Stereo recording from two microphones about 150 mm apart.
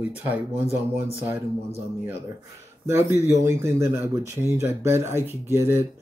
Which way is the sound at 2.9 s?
15° right (ahead or behind).